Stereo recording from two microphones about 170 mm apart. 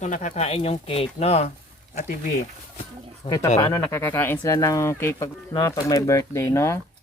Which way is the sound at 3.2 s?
30° left (ahead or behind).